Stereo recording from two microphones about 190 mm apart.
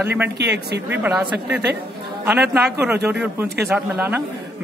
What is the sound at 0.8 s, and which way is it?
Speech, 10° right (ahead or behind).